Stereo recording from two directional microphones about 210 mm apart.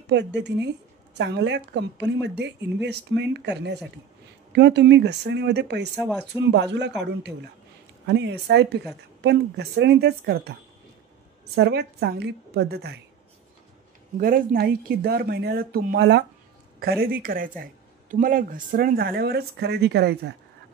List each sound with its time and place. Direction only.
0.0 s a woman's voice: 55° right (ahead or behind)
8.1 s speech: 55° right (ahead or behind)
11.5 s speech: 50° right (ahead or behind)
14.1 s speech: 40° right (ahead or behind)